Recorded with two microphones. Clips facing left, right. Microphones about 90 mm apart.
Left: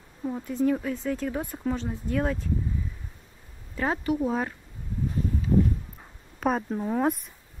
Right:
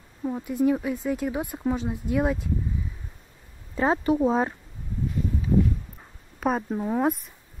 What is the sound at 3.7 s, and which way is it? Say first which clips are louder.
Speech: right 4 dB; 25° right (ahead or behind).